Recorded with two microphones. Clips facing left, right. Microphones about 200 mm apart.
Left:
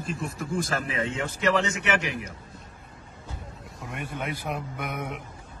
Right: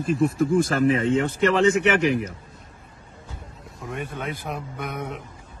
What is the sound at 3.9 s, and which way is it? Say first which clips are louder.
Speech: right 3 dB; 15° left (ahead or behind).